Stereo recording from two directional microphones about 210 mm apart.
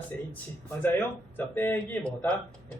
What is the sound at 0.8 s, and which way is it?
Speech, 5° left (ahead or behind).